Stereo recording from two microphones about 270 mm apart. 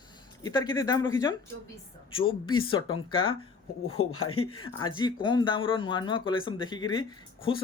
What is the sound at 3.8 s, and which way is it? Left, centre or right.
Speech, left.